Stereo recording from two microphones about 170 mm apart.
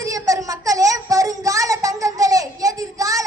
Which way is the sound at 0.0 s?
20° right (ahead or behind).